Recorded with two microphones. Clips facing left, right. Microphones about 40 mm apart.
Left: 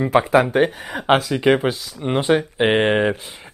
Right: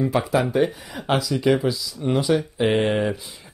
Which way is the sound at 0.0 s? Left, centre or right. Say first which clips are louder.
Left 5 dB; left.